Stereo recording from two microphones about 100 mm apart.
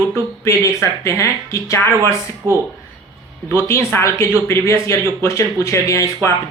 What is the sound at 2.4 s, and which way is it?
Speech, 30° right (ahead or behind).